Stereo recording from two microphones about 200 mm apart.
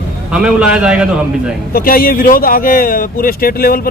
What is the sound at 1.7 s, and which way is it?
Speech, 45° left (ahead or behind).